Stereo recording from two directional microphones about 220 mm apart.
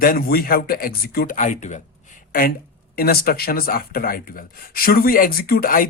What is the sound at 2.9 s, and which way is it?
Speech, 45° left (ahead or behind).